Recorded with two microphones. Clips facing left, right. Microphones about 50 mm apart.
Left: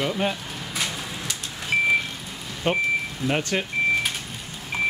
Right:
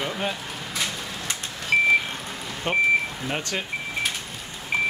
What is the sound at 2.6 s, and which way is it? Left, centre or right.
Speech, centre.